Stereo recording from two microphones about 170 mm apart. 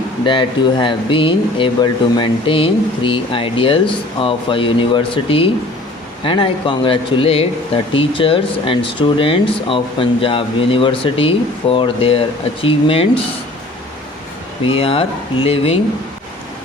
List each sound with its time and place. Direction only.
0.3 s speech: 30° left (ahead or behind)
14.6 s speech: 30° left (ahead or behind)